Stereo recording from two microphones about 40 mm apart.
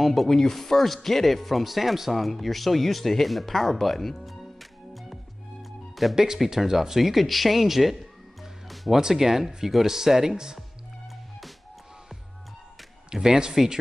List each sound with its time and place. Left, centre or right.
0.0 s speech: centre
2.1 s a sound: centre
6.1 s speech: centre
13.1 s speech: centre